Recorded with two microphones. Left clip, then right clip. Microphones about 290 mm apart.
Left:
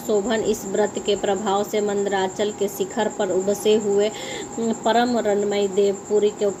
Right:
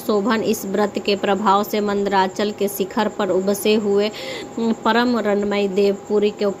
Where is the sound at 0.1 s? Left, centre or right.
Right.